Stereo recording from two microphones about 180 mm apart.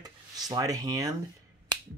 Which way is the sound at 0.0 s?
20° right (ahead or behind).